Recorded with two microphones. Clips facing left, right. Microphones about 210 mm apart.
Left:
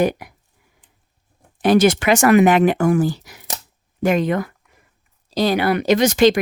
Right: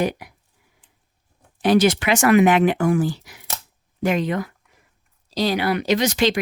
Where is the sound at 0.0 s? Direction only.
50° left (ahead or behind).